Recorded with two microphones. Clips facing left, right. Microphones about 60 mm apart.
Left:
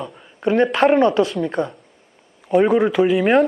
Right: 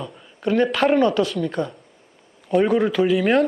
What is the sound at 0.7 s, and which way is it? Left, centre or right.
A man's voice, centre.